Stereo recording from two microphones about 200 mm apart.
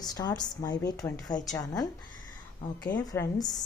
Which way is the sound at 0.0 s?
20° left (ahead or behind).